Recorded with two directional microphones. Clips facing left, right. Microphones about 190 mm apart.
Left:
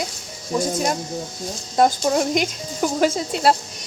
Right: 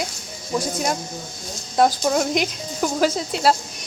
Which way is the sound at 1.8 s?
Centre (ahead or behind).